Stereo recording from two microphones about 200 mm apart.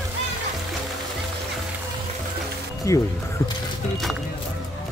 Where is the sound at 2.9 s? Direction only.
15° left (ahead or behind).